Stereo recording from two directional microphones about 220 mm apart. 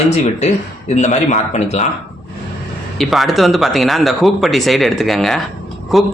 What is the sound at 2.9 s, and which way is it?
Speech, centre (ahead or behind).